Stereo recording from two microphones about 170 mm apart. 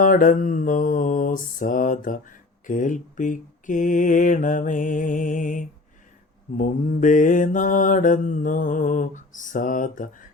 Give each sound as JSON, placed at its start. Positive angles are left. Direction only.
{"t": 0.0, "sound": "mantra", "side_deg": 50}